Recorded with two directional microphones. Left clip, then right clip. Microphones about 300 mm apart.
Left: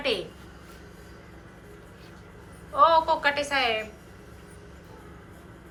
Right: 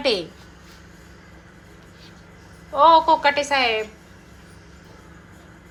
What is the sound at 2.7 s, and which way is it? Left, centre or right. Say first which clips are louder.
A woman's voice: right 6 dB; centre.